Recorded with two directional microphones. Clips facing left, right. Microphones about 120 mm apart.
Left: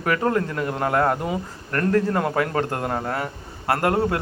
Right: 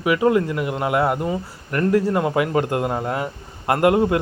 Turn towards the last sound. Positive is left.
turn(degrees=-15)  # may be behind; listen again after turning